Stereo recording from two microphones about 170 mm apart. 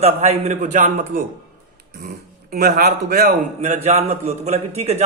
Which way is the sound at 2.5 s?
60° right (ahead or behind).